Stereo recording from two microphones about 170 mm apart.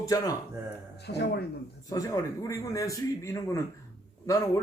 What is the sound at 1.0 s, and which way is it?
Speech, 75° left (ahead or behind).